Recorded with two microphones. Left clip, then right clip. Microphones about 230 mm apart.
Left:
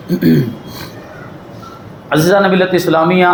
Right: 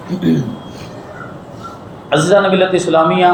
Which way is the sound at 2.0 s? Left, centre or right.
Left.